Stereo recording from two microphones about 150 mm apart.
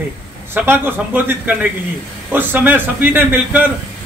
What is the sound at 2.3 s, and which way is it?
A man's voice, 15° right (ahead or behind).